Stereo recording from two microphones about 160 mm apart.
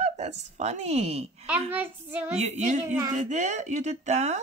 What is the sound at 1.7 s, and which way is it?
Speech, 10° right (ahead or behind).